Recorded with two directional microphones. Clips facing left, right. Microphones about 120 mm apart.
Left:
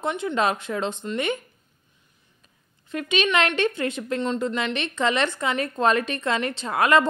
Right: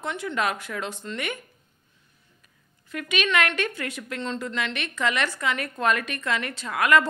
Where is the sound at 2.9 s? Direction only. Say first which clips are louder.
Left 3 dB; 25° left (ahead or behind).